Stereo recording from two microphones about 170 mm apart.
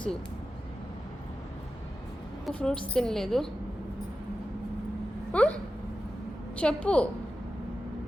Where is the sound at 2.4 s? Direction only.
5° left (ahead or behind).